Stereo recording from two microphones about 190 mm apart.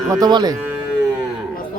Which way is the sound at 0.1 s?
20° right (ahead or behind).